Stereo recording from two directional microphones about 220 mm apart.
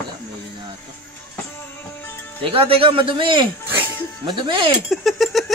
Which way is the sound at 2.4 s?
25° right (ahead or behind).